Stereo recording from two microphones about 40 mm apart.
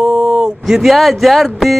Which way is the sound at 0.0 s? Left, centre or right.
Right.